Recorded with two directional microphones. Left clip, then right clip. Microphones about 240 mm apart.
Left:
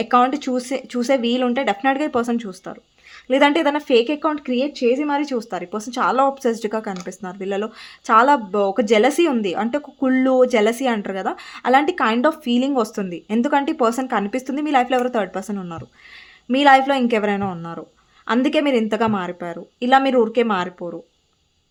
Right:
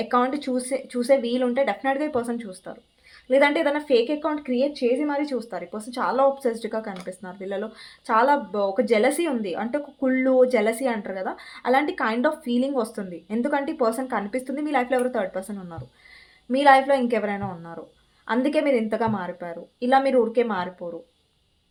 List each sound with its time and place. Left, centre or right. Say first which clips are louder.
0.0 s speech: left 6 dB; left